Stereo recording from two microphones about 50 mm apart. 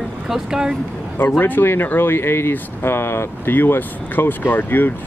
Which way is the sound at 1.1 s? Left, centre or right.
Left.